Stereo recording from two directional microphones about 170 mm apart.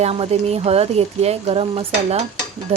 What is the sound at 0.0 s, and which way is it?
Speech, 35° right (ahead or behind).